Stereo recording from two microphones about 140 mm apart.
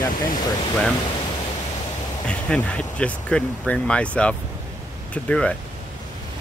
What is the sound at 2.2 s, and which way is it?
Speech, 10° left (ahead or behind).